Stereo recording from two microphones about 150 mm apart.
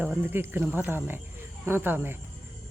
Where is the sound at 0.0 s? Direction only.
15° right (ahead or behind).